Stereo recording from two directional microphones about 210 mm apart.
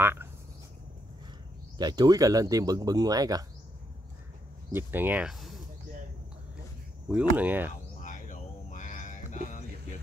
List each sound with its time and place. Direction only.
0.0 s speech: 10° right (ahead or behind)
1.8 s speech: 20° right (ahead or behind)
4.7 s speech: 10° right (ahead or behind)
7.1 s speech: 5° right (ahead or behind)
8.0 s a sound: 35° left (ahead or behind)